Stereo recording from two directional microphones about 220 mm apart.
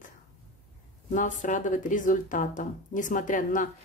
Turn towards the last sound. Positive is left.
turn(degrees=35)  # may be behind; listen again after turning